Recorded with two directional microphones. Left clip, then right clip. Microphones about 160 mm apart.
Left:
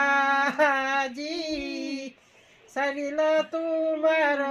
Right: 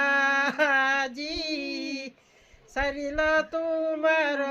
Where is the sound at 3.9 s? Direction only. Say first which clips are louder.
Left 1 dB; 35° right (ahead or behind).